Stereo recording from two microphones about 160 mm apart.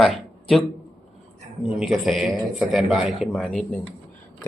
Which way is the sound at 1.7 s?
Centre (ahead or behind).